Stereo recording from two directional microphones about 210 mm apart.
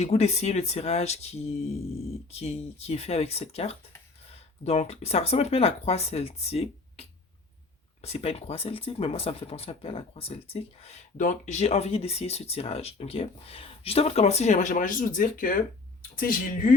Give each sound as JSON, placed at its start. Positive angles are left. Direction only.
{"t": 0.0, "sound": "speech", "side_deg": 30}